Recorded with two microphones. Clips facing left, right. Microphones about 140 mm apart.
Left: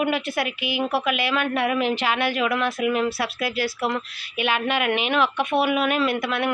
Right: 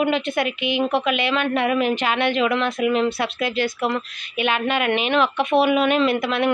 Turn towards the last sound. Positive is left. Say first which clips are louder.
# right 4 dB
turn(degrees=0)  # may be behind; listen again after turning